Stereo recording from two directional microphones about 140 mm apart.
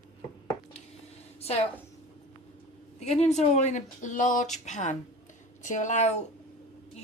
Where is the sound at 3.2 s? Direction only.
55° left (ahead or behind).